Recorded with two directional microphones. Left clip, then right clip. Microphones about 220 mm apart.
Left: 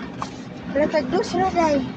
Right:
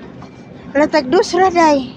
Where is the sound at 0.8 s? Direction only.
55° right (ahead or behind).